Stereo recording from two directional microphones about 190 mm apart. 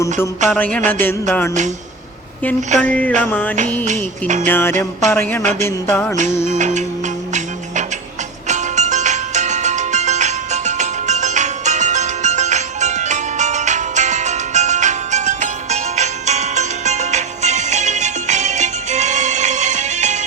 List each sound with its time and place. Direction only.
0.5 s speech: 5° left (ahead or behind)
0.9 s music: 10° left (ahead or behind)
2.6 s music: 40° right (ahead or behind)
2.8 s music: 10° left (ahead or behind)
3.8 s music: 40° right (ahead or behind)
4.4 s music: 10° left (ahead or behind)
5.4 s music: 40° right (ahead or behind)
5.6 s music: 10° left (ahead or behind)
6.3 s music: 35° left (ahead or behind)
6.6 s music: 40° right (ahead or behind)
8.4 s music: 40° right (ahead or behind)